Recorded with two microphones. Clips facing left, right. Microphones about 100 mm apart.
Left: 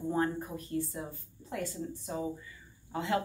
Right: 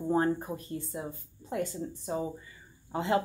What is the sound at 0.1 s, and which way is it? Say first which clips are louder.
Speech: right 5 dB; 30° right (ahead or behind).